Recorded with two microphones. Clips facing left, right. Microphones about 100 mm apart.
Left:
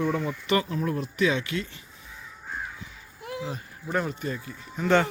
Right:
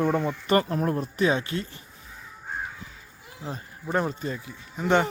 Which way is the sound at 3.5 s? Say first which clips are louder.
Right 1 dB; 30° right (ahead or behind).